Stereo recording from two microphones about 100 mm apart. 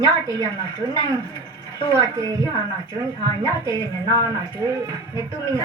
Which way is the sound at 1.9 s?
35° right (ahead or behind).